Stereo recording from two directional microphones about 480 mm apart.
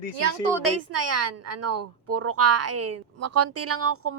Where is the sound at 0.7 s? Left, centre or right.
Right.